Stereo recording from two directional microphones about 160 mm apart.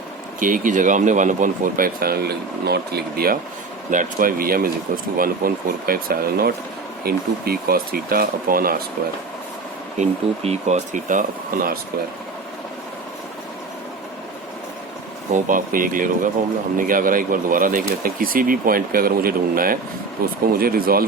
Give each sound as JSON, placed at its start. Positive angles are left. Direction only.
{"t": 0.3, "sound": "speech", "side_deg": -55}
{"t": 3.8, "sound": "speech", "side_deg": -55}
{"t": 10.0, "sound": "speech", "side_deg": -45}
{"t": 15.3, "sound": "speech", "side_deg": -55}